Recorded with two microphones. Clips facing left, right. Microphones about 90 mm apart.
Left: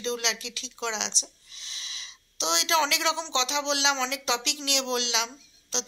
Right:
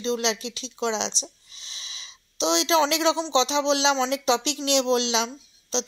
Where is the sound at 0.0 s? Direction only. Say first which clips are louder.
Right 5 dB; 25° right (ahead or behind).